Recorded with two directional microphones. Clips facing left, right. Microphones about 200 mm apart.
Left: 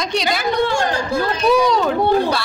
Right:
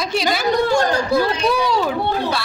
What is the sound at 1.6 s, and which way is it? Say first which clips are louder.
Speech: left 3 dB; 5° right (ahead or behind).